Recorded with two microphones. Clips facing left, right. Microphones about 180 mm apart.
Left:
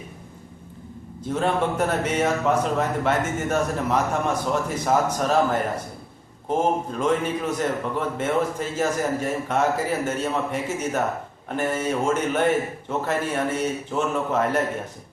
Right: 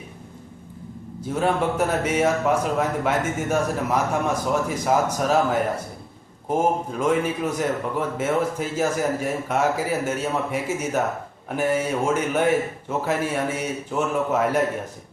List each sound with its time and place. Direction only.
1.2 s a man's voice: 10° right (ahead or behind)